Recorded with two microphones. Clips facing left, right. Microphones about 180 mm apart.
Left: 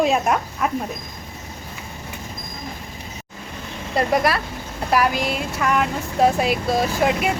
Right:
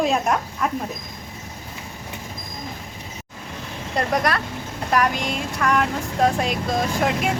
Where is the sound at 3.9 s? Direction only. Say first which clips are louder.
Left 3 dB; 5° left (ahead or behind).